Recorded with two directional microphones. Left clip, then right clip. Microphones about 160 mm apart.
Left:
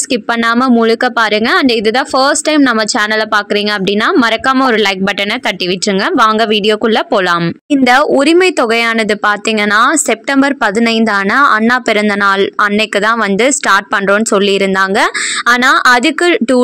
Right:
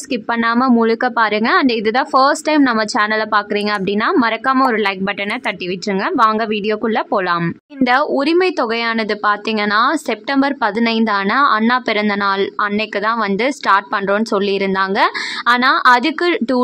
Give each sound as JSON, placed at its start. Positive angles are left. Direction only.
{"t": 0.4, "sound": "a woman's voice", "side_deg": 20}
{"t": 6.1, "sound": "a woman's voice", "side_deg": 25}